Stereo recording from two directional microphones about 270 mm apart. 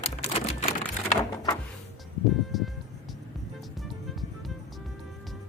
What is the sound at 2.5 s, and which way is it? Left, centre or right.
Music, centre.